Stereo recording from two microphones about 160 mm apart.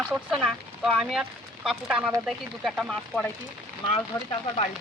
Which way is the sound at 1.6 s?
5° right (ahead or behind).